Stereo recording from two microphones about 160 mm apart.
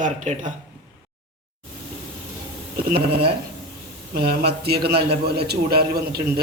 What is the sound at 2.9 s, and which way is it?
Speech, 85° right.